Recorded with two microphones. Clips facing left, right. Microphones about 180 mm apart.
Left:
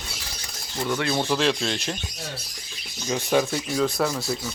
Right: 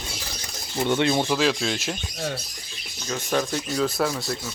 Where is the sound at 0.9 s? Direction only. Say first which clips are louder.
Right 4 dB; 20° right (ahead or behind).